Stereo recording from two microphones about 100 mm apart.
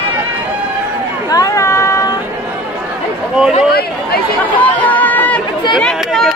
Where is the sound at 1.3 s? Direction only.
35° left (ahead or behind).